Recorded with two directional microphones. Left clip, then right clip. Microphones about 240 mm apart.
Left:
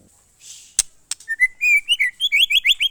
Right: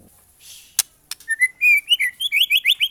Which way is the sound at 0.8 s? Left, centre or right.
Centre.